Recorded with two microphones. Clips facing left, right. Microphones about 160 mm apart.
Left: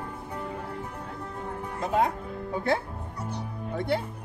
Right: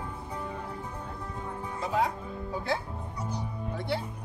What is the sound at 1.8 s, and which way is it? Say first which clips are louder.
Music: left 3 dB; 55° left (ahead or behind).